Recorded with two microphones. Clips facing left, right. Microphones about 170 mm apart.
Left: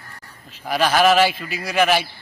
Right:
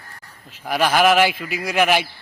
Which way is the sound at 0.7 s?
10° right (ahead or behind).